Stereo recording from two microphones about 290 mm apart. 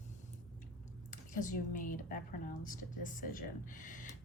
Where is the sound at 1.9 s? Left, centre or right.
Left.